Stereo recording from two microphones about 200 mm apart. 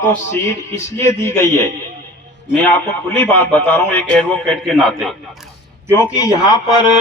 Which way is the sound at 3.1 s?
10° left (ahead or behind).